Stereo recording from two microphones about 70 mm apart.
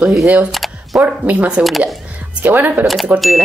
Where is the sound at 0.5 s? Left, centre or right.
Centre.